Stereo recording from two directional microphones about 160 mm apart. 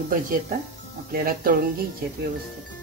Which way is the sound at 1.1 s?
65° right (ahead or behind).